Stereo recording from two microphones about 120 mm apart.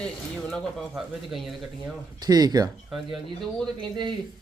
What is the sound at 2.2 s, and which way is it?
Speech, 35° right (ahead or behind).